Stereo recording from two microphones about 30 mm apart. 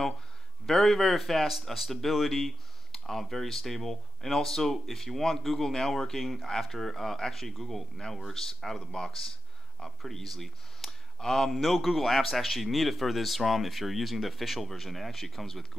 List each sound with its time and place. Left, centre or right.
0.7 s speech: centre
6.2 s speech: centre
8.7 s speech: left
9.8 s speech: centre
11.6 s speech: centre